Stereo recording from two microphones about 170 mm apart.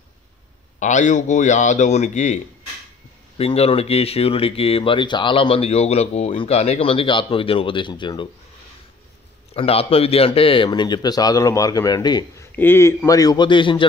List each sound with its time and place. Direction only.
0.7 s a man's voice: 45° left (ahead or behind); by 8.3 s 25° left (ahead or behind)
9.5 s a man's voice: 35° left (ahead or behind)
12.5 s a man's voice: 15° left (ahead or behind); by 13.8 s 30° left (ahead or behind)